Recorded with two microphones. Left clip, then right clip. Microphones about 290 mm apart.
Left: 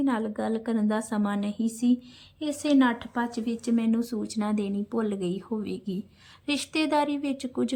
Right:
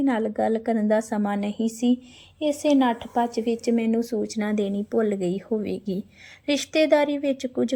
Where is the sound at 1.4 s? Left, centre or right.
Right.